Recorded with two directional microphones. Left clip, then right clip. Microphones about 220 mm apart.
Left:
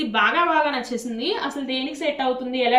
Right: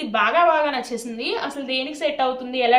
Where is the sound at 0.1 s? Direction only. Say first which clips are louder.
Right 3 dB; 45° right (ahead or behind).